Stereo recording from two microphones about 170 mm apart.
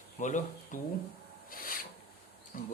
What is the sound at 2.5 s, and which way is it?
Speech, 50° left (ahead or behind).